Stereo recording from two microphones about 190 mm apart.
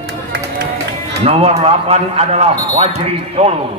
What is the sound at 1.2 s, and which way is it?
A man's voice, 30° right (ahead or behind).